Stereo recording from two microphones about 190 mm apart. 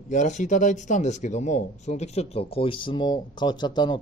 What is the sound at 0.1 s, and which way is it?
Speech, 40° left (ahead or behind).